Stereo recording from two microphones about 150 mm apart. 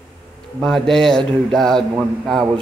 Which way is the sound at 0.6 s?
5° left (ahead or behind).